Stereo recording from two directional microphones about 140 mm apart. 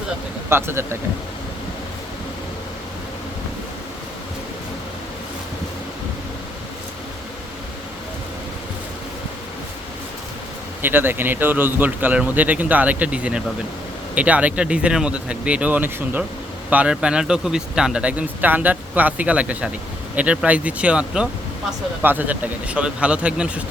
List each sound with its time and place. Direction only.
0.5 s a man's voice: 15° right (ahead or behind)
10.8 s a man's voice: 15° right (ahead or behind)